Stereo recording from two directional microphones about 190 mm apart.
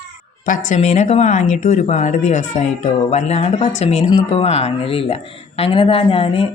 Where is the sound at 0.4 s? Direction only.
45° left (ahead or behind).